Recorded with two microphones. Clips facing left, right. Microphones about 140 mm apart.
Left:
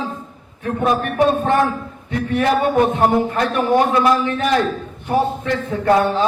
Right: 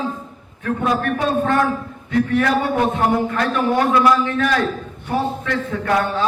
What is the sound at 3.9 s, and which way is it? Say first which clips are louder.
Speech: even; 25° left (ahead or behind).